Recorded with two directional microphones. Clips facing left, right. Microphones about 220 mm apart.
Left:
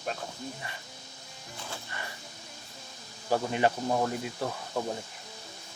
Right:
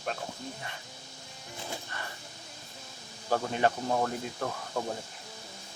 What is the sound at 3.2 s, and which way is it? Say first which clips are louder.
Speech: left 1 dB; 10° left (ahead or behind).